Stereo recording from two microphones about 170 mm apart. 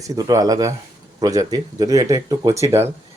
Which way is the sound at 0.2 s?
20° right (ahead or behind).